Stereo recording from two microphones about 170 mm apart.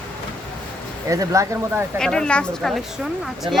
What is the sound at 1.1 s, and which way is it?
Speech, 20° right (ahead or behind).